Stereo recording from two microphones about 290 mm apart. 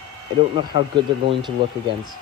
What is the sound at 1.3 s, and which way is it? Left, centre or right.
Speech, centre.